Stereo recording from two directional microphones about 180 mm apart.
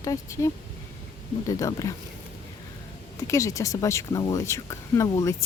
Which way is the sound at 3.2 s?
15° left (ahead or behind).